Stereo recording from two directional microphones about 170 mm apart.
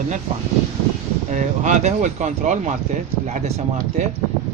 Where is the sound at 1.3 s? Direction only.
45° right (ahead or behind).